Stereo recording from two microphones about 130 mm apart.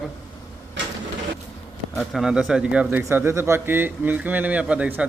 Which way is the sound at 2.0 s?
Centre (ahead or behind).